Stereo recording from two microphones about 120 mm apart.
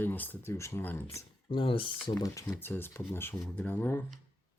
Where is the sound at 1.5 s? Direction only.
45° left (ahead or behind).